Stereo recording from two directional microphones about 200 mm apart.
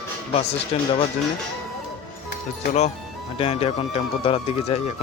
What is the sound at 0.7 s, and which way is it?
Speech, 30° left (ahead or behind).